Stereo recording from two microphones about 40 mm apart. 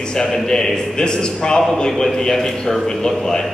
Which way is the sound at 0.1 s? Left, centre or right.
Centre.